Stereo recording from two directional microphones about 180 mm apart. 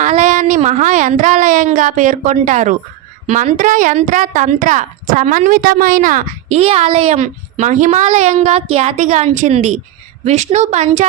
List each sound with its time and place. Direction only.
0.0 s a woman's voice: 40° right (ahead or behind)